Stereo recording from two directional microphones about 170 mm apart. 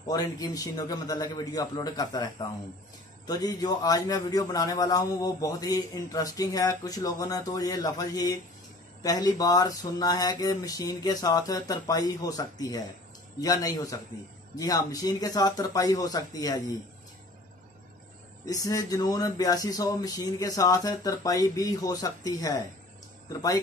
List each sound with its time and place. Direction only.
0.1 s a man's voice: 20° left (ahead or behind)
18.4 s a man's voice: 20° left (ahead or behind)